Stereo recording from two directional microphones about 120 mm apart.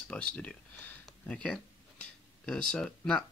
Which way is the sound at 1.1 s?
5° left (ahead or behind).